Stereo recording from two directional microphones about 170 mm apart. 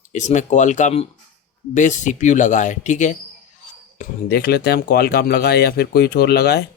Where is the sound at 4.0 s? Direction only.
65° left (ahead or behind).